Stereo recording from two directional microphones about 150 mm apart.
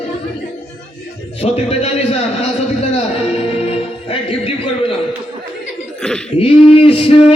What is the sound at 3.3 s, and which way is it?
Music, 40° left (ahead or behind).